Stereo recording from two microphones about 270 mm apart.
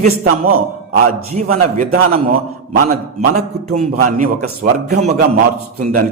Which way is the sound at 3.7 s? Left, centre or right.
Right.